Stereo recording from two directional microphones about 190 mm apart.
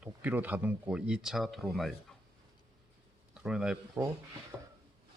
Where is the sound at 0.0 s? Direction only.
10° right (ahead or behind).